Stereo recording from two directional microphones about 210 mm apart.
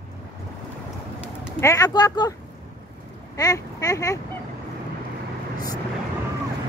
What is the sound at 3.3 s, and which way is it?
Speech, 15° left (ahead or behind).